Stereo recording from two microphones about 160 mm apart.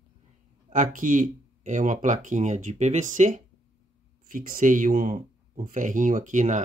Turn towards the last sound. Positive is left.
turn(degrees=-50)  # may be behind; listen again after turning